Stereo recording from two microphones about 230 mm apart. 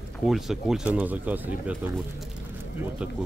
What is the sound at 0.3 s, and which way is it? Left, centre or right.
Speech, centre.